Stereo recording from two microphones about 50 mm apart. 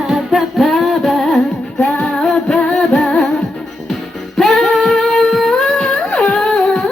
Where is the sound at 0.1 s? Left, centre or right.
Centre.